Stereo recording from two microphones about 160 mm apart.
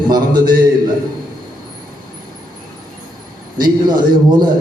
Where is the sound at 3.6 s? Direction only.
25° right (ahead or behind).